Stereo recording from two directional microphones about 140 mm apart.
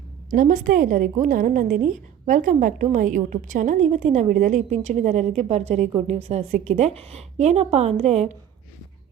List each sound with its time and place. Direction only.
0.3 s a woman's voice: 75° right (ahead or behind); by 8.3 s 50° right (ahead or behind)